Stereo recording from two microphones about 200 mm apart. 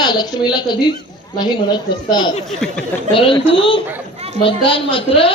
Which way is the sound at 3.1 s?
25° left (ahead or behind).